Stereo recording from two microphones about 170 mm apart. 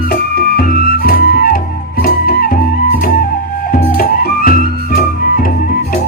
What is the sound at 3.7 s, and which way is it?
Music, 60° left (ahead or behind).